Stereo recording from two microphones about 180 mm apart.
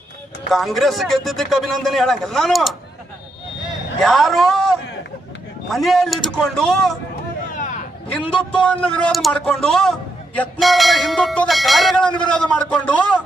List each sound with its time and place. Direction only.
0.5 s a man's voice: centre (ahead or behind)
4.0 s a man's voice: centre (ahead or behind)
7.5 s a sound: 45° left (ahead or behind)
8.7 s a man's voice: 5° left (ahead or behind)